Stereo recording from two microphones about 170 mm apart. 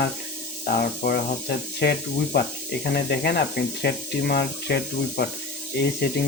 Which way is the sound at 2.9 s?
65° left (ahead or behind).